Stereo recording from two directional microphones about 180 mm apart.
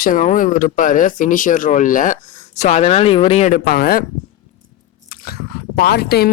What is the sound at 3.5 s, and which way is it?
Speech, 55° left (ahead or behind).